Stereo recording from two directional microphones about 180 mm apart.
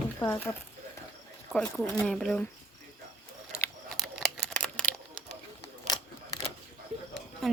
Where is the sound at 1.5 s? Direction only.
5° left (ahead or behind).